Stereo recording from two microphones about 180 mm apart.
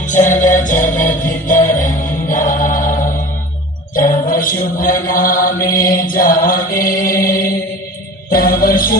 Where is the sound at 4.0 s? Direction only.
50° left (ahead or behind).